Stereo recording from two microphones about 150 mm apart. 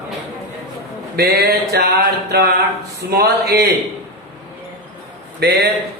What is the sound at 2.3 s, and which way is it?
Music, 90° right.